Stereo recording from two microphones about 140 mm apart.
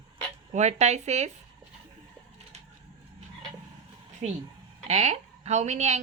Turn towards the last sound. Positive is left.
turn(degrees=-50)  # may be behind; listen again after turning